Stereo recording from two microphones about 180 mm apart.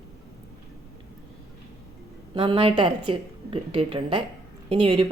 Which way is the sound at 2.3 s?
30° right (ahead or behind).